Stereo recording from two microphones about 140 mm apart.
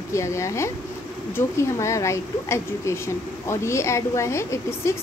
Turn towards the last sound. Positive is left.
turn(degrees=20)  # may be behind; listen again after turning